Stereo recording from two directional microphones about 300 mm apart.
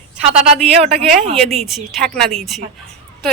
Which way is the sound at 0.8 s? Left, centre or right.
Centre.